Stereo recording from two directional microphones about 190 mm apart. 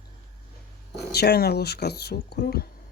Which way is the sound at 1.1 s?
55° left (ahead or behind).